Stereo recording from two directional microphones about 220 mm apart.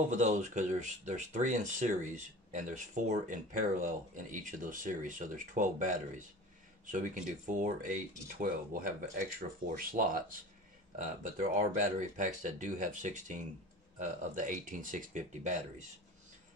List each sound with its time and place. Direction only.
0.1 s speech: 35° right (ahead or behind)